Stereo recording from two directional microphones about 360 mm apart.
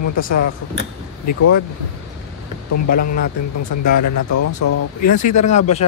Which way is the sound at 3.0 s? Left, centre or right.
Left.